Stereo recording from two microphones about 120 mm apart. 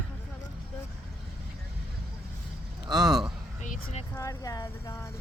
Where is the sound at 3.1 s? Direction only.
5° right (ahead or behind).